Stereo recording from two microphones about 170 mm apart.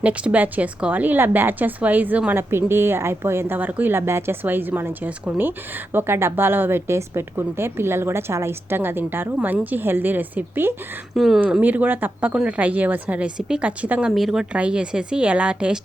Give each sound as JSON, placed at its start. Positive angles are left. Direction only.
{"t": 0.0, "sound": "a woman's voice", "side_deg": -10}
{"t": 11.1, "sound": "a woman's voice", "side_deg": 0}